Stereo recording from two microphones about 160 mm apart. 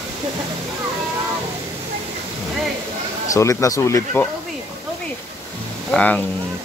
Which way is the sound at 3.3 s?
20° left (ahead or behind).